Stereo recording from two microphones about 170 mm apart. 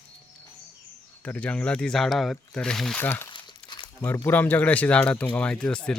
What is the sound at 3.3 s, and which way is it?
Crumpling, 30° left (ahead or behind).